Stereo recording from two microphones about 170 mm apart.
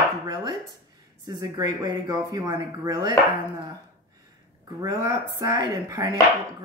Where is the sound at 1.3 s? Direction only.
20° right (ahead or behind).